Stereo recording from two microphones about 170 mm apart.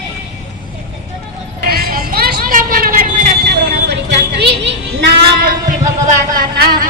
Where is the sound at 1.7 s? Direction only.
60° right (ahead or behind).